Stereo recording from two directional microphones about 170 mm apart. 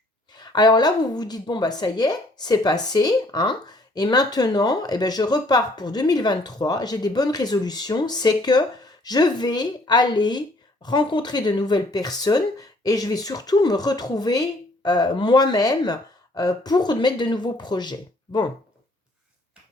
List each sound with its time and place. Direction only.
0.3 s a woman's voice: 25° left (ahead or behind)